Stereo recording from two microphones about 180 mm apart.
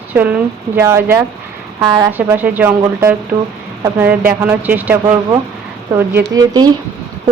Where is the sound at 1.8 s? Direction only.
25° right (ahead or behind).